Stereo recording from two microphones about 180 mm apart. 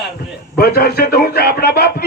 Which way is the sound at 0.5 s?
60° left (ahead or behind).